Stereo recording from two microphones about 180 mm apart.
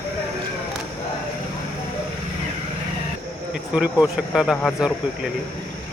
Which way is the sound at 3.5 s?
5° right (ahead or behind).